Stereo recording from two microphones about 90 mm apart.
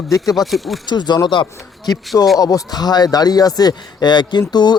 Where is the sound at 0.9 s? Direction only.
55° left (ahead or behind).